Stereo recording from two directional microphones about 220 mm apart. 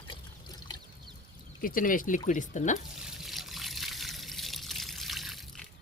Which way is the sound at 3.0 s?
Centre (ahead or behind).